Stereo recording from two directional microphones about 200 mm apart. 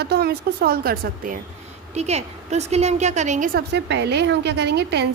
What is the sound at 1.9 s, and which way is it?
A woman's voice, 35° right (ahead or behind).